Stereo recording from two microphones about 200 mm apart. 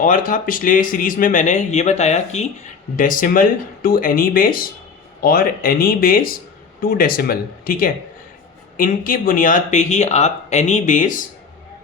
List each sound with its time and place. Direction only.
0.0 s speech: 40° left (ahead or behind)